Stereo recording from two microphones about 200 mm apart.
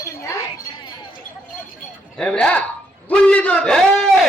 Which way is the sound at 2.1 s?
5° left (ahead or behind).